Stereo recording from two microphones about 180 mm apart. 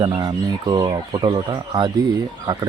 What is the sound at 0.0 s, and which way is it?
Speech, 25° right (ahead or behind).